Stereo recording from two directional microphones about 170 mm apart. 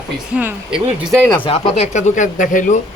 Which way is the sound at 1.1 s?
5° left (ahead or behind).